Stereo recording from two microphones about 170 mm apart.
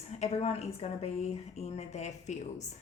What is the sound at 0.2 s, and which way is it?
A woman's voice, 40° left (ahead or behind).